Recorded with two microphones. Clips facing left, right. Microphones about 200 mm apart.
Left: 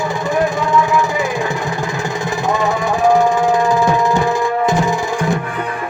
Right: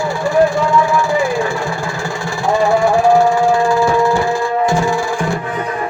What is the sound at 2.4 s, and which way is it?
Music, 20° left (ahead or behind).